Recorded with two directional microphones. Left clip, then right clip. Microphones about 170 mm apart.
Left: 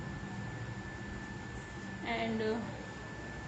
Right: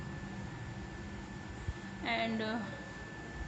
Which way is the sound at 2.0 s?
45° right (ahead or behind).